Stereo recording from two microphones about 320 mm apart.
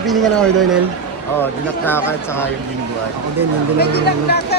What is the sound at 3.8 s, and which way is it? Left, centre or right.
Speech, left.